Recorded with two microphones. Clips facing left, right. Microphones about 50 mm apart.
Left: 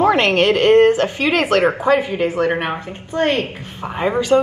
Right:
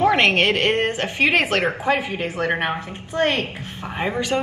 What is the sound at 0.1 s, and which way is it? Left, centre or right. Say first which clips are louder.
A woman's voice: left 3 dB; right.